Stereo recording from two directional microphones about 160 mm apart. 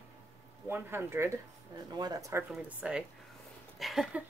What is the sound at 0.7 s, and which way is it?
Speech, 15° right (ahead or behind).